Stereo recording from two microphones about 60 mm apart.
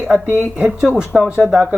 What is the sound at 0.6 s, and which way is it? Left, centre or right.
Speech, centre.